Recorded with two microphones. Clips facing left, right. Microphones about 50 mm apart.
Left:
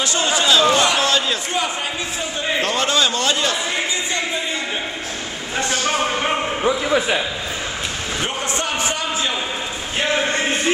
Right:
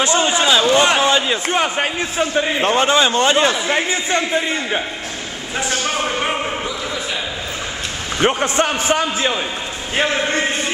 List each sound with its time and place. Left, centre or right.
0.0 s a sound: right
1.5 s a man's voice: right
2.6 s speech: right
5.6 s a man's voice: centre
6.6 s speech: left
8.2 s a man's voice: right